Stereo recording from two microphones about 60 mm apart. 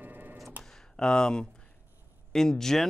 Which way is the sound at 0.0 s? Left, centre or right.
Right.